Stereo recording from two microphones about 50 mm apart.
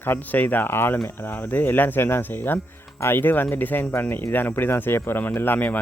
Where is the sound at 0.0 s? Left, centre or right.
Left.